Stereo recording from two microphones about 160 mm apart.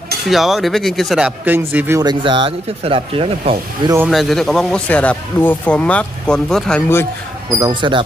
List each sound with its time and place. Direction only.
0.3 s speech: centre (ahead or behind)
2.0 s speech: 30° right (ahead or behind)
4.1 s speech: centre (ahead or behind)
7.5 s speech: 25° right (ahead or behind)